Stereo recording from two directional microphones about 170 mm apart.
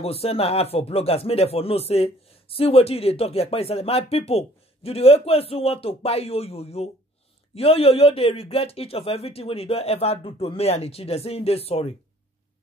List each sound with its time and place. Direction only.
0.0 s speech: 35° left (ahead or behind)